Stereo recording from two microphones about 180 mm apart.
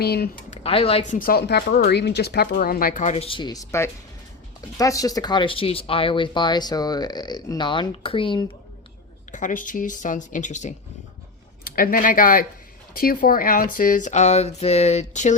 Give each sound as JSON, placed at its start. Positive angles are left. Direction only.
{"t": 0.0, "sound": "speech", "side_deg": 60}
{"t": 0.5, "sound": "speech", "side_deg": 35}
{"t": 9.3, "sound": "speech", "side_deg": 45}
{"t": 11.6, "sound": "speech", "side_deg": 50}